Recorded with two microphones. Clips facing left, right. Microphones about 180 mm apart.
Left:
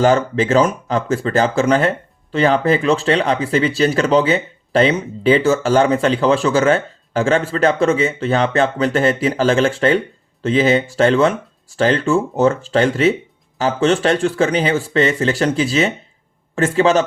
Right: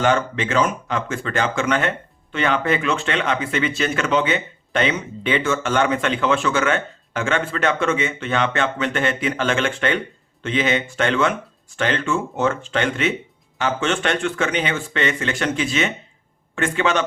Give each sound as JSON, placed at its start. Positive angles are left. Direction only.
{"t": 0.0, "sound": "speech", "side_deg": 35}